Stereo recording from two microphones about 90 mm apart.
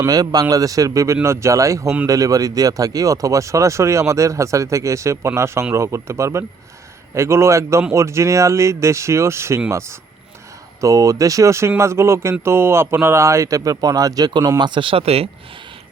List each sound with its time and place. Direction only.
0.1 s a man's voice: 45° right (ahead or behind)
14.6 s speech: 65° right (ahead or behind); by 15.3 s 90° right